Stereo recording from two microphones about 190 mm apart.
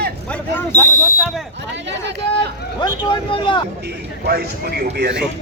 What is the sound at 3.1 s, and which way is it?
Speech, 25° left (ahead or behind).